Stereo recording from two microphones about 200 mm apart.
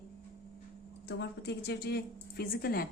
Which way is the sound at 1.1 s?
55° left (ahead or behind).